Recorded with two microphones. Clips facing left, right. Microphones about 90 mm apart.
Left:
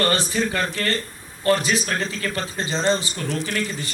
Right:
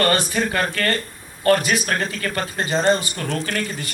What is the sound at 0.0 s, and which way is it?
A man's voice, 55° right (ahead or behind).